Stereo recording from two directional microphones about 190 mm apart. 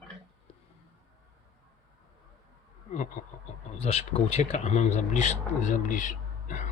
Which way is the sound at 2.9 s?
40° left (ahead or behind).